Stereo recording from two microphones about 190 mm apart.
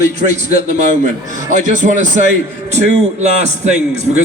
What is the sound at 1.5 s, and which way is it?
Speech, 40° right (ahead or behind).